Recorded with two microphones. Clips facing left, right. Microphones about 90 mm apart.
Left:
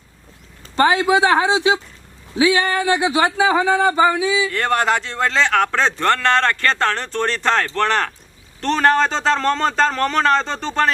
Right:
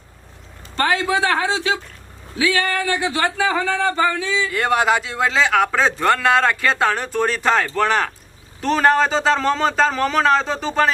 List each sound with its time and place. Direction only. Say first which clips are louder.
0.8 s speech: left 4 dB; 20° left (ahead or behind)
4.4 s a man's voice: right 1 dB; 5° right (ahead or behind)